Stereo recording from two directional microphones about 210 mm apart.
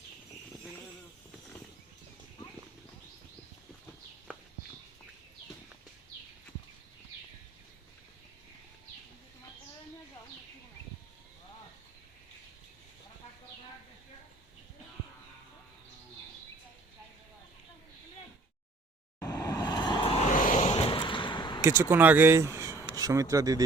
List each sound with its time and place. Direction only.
19.2 s vehicle: 15° left (ahead or behind)
21.6 s speech: 10° right (ahead or behind)
22.5 s a sound: 15° right (ahead or behind)
22.9 s speech: 15° right (ahead or behind)